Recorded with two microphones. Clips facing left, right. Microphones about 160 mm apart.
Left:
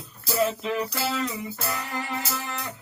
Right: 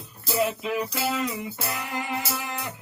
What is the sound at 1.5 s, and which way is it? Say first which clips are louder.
Music: even; 15° right (ahead or behind).